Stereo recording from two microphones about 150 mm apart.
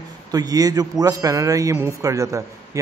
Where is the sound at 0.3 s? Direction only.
25° right (ahead or behind).